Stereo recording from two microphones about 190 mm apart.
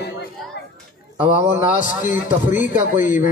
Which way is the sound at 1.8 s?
45° left (ahead or behind).